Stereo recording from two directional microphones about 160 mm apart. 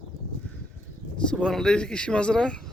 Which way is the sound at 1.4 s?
5° left (ahead or behind).